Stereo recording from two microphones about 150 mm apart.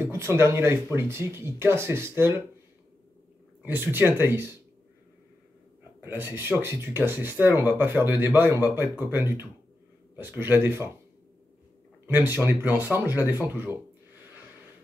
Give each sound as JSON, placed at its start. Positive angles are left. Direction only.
{"t": 0.0, "sound": "speech", "side_deg": -15}
{"t": 3.6, "sound": "speech", "side_deg": -15}
{"t": 5.9, "sound": "speech", "side_deg": -15}
{"t": 12.1, "sound": "speech", "side_deg": -15}